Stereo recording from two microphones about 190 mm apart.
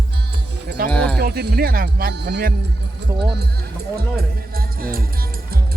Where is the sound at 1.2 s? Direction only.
60° right (ahead or behind).